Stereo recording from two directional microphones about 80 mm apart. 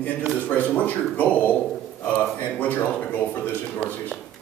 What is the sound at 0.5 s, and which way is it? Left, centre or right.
Speech, centre.